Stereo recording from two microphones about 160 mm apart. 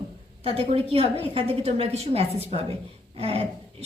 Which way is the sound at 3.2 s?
40° right (ahead or behind).